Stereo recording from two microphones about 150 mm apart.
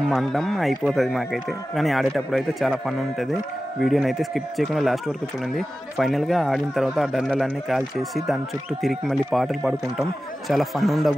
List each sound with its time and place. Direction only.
0.1 s speech: centre (ahead or behind)
8.8 s speech: centre (ahead or behind)